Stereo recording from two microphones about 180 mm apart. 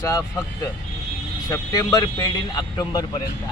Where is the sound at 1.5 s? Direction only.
20° left (ahead or behind).